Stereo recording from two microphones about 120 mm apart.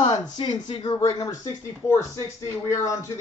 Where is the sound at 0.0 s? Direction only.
50° left (ahead or behind).